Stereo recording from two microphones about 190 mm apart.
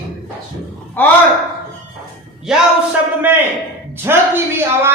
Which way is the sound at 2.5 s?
5° right (ahead or behind).